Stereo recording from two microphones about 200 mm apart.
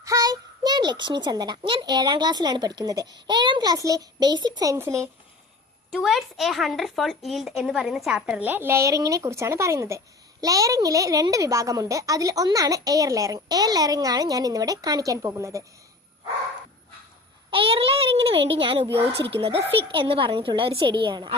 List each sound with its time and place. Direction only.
0.0 s a child's voice: 15° right (ahead or behind)
5.9 s a woman's voice: centre (ahead or behind)
17.5 s a child's voice: 25° right (ahead or behind)